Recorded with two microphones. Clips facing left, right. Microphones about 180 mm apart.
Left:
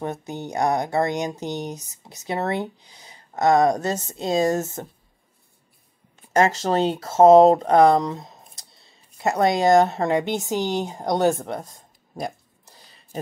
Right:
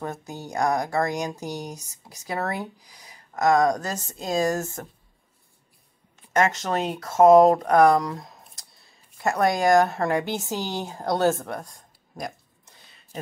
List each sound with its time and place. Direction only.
0.0 s speech: 20° left (ahead or behind)
6.3 s speech: 30° left (ahead or behind)
12.6 s a sound: 35° left (ahead or behind)